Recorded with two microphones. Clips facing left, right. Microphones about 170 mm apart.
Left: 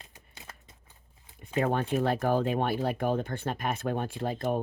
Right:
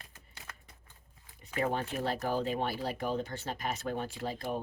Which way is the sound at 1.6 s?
55° left (ahead or behind).